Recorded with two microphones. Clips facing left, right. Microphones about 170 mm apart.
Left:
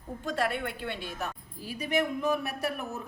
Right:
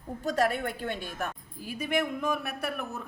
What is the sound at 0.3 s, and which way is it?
A woman's voice, 40° right (ahead or behind).